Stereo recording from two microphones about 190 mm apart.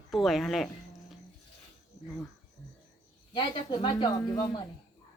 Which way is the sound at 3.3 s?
25° left (ahead or behind).